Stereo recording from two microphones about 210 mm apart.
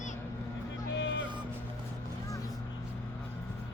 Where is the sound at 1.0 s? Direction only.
60° left (ahead or behind).